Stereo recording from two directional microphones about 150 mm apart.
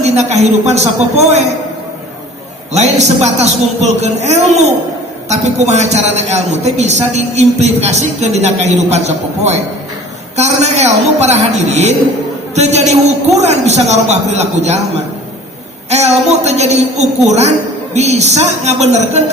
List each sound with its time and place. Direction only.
0.0 s a man's voice: 50° right (ahead or behind)
2.7 s a man's voice: 45° right (ahead or behind)